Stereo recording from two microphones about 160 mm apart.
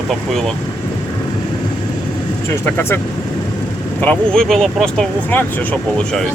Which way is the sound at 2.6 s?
15° left (ahead or behind).